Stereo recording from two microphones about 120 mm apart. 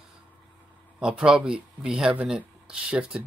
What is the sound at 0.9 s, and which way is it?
Speech, 10° right (ahead or behind).